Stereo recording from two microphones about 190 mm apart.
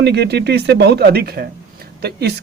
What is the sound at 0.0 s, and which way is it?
Speech, 60° right (ahead or behind).